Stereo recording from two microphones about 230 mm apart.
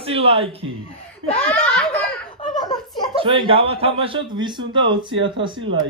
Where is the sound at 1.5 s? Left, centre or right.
Centre.